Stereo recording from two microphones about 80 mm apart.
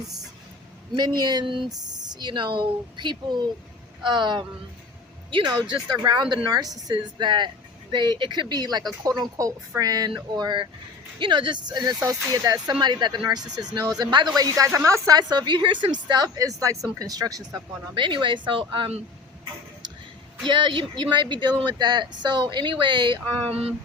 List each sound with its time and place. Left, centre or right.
0.9 s speech: right
1.7 s speech: right
6.8 s speech: right
9.0 s speech: right
12.0 s speech: right
12.8 s speech: right
14.3 s speech: right
14.7 s a woman's voice: right
15.1 s speech: right
17.9 s speech: right
20.4 s speech: right